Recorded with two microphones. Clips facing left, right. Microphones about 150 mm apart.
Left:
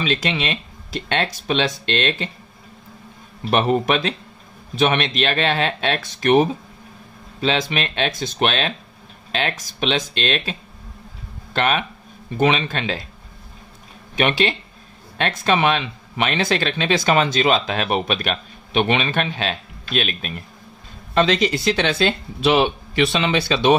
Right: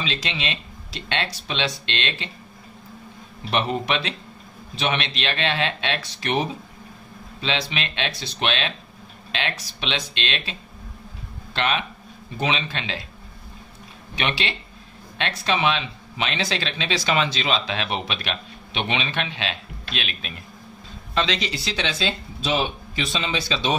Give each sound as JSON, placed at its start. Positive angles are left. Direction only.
{"t": 0.0, "sound": "speech", "side_deg": 50}
{"t": 3.4, "sound": "speech", "side_deg": 50}
{"t": 11.5, "sound": "speech", "side_deg": 50}
{"t": 14.1, "sound": "speech", "side_deg": 45}